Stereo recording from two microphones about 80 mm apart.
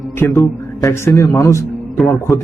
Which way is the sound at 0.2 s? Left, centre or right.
Left.